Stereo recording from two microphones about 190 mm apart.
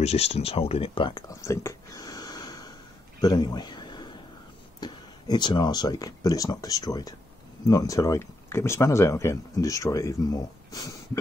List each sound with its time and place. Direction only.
0.0 s speech: 35° left (ahead or behind)
3.2 s a sound: 20° left (ahead or behind)
4.7 s speech: 20° left (ahead or behind)